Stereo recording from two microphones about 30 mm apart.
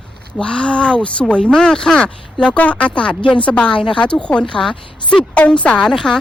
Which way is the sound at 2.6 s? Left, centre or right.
Left.